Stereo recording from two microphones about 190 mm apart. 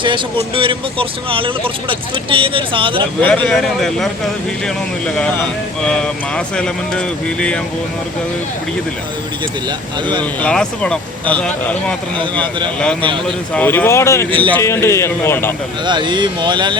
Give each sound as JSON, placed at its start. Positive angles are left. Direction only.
{"t": 0.0, "sound": "speech", "side_deg": -25}
{"t": 3.2, "sound": "speech", "side_deg": 10}
{"t": 9.6, "sound": "speech", "side_deg": -25}
{"t": 10.4, "sound": "speech", "side_deg": 5}
{"t": 14.3, "sound": "speech", "side_deg": -25}
{"t": 14.5, "sound": "speech", "side_deg": 15}
{"t": 15.9, "sound": "speech", "side_deg": -25}